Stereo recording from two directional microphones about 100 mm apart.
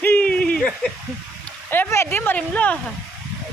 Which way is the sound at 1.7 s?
25° left (ahead or behind).